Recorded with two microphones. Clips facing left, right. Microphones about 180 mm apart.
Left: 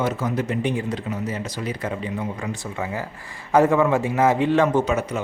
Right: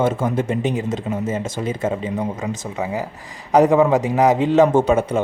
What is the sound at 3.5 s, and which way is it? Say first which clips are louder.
A man's voice: right 3 dB; 20° right (ahead or behind).